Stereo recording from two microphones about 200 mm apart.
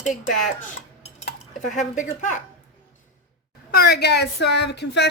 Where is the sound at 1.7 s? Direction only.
40° left (ahead or behind).